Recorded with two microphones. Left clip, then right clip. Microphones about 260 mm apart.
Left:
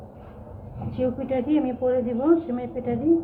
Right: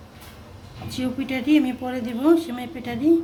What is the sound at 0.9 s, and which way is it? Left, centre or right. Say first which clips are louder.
Speech: left 3 dB; right.